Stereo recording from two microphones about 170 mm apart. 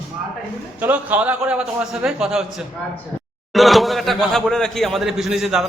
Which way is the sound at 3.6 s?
Centre (ahead or behind).